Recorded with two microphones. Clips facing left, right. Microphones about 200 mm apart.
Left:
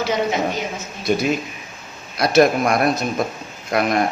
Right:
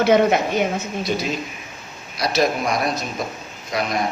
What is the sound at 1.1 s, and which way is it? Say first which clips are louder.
A man's voice: left 7 dB; 50° left (ahead or behind).